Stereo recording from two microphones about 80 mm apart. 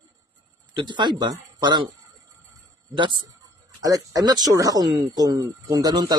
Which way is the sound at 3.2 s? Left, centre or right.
Right.